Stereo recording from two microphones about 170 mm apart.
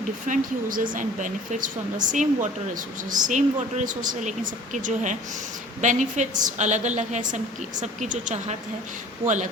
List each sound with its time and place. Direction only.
0.3 s a woman's voice: 50° right (ahead or behind)